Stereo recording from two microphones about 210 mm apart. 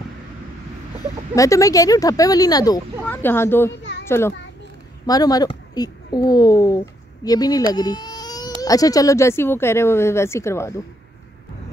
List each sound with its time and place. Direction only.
1.3 s speech: 15° left (ahead or behind)
4.0 s a sound: 10° left (ahead or behind)
5.0 s a woman's voice: 20° left (ahead or behind)
7.7 s baby cry: 20° left (ahead or behind)
8.6 s speech: 15° left (ahead or behind)